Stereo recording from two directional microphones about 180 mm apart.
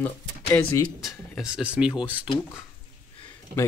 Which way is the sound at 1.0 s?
Centre (ahead or behind).